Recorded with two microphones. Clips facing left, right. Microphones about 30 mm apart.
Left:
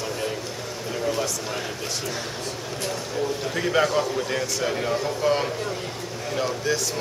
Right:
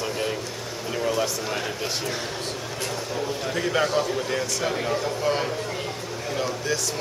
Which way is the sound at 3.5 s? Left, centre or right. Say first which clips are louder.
Left 1 dB; centre.